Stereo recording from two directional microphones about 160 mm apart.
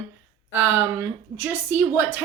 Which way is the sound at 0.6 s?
15° right (ahead or behind).